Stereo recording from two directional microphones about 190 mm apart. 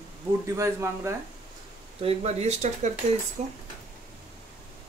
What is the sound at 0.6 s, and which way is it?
Speech, 15° right (ahead or behind).